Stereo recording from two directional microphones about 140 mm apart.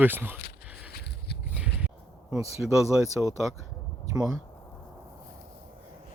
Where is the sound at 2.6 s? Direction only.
5° right (ahead or behind).